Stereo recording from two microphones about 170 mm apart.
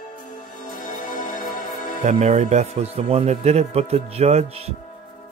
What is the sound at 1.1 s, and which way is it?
Music, 50° left (ahead or behind).